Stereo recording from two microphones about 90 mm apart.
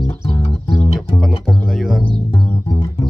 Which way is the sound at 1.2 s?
Centre (ahead or behind).